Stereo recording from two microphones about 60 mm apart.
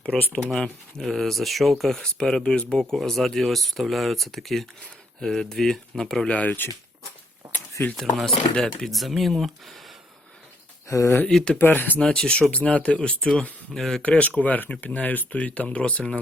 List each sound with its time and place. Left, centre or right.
0.5 s speech: centre
6.2 s speech: left
7.4 s a sound: right
7.9 s speech: centre
10.8 s speech: left
11.3 s speech: centre
11.5 s speech: left
11.9 s speech: centre
13.1 s speech: centre
14.0 s speech: left